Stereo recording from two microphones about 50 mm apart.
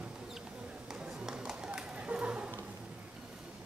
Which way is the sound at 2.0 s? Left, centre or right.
Right.